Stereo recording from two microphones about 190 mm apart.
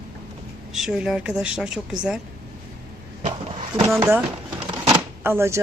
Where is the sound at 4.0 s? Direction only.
10° right (ahead or behind).